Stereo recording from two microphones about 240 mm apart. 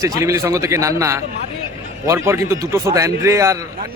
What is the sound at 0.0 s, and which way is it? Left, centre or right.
Speech, centre.